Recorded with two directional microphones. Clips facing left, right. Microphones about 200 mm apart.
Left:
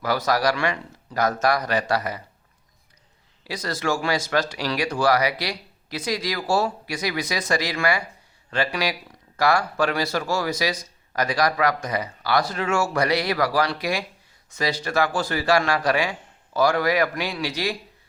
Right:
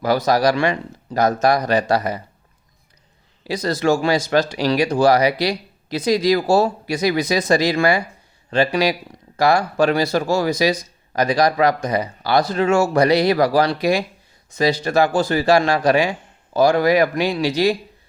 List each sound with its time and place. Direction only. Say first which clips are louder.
0.0 s speech: right 5 dB; 20° right (ahead or behind)
3.4 s speech: right 8 dB; 20° right (ahead or behind)